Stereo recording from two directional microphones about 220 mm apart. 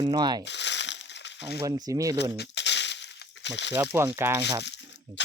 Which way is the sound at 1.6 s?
15° right (ahead or behind).